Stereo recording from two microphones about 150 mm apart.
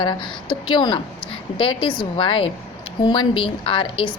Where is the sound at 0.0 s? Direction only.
30° left (ahead or behind).